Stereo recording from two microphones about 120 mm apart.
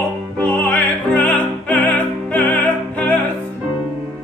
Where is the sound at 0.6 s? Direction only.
10° left (ahead or behind).